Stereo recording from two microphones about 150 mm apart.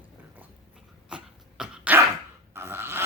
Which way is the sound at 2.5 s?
15° right (ahead or behind).